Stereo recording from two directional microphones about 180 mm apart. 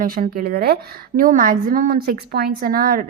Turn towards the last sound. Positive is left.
turn(degrees=-55)  # may be behind; listen again after turning